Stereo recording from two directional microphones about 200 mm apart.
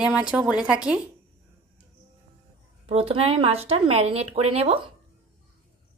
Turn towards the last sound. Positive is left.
turn(degrees=-30)  # may be behind; listen again after turning